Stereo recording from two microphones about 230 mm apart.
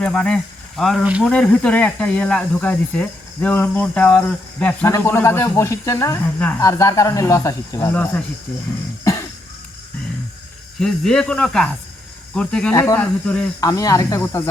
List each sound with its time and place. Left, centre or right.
0.0 s speech: centre
10.8 s speech: centre